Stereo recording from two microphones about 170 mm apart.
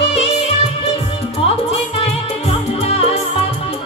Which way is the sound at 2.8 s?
35° left (ahead or behind).